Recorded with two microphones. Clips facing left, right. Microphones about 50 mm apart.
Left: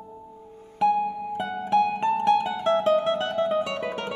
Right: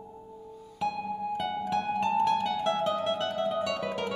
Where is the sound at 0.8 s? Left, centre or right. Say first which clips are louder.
Left 9 dB; left.